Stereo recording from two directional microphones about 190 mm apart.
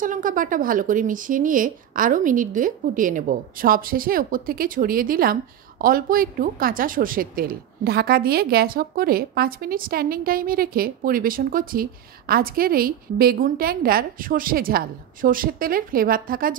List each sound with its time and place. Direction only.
0.0 s speech: 45° right (ahead or behind)